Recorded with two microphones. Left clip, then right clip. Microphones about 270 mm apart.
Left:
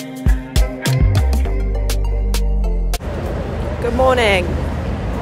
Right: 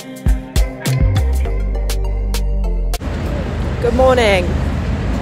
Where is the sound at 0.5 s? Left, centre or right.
Centre.